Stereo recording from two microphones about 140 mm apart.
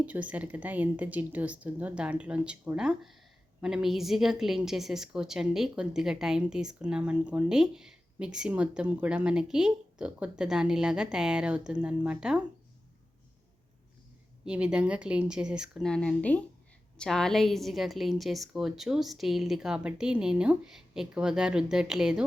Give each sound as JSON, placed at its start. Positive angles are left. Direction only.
{"t": 0.0, "sound": "a woman's voice", "side_deg": -10}
{"t": 14.4, "sound": "a woman's voice", "side_deg": -5}
{"t": 15.9, "sound": "a woman's voice", "side_deg": 5}